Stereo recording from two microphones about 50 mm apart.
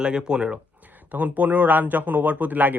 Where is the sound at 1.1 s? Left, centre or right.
Right.